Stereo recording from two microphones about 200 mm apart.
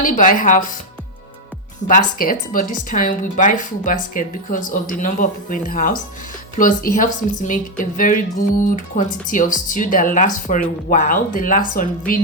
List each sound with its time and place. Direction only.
0.0 s speech: 40° left (ahead or behind)
1.9 s a woman's voice: 40° left (ahead or behind)